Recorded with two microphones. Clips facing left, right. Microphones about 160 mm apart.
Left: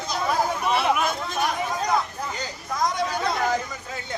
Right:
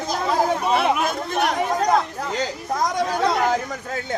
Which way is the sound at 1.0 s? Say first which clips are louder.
Right 3 dB; 65° right (ahead or behind).